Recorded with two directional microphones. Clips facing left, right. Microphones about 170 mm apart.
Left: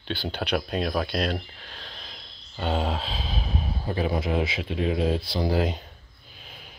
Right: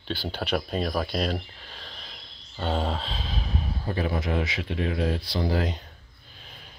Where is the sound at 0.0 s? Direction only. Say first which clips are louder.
Left 1 dB; 5° right (ahead or behind).